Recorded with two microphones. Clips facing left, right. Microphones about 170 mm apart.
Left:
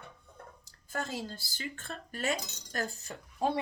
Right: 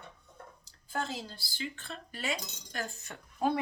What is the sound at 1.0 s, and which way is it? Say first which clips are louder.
Speech: left 1 dB; 45° left (ahead or behind).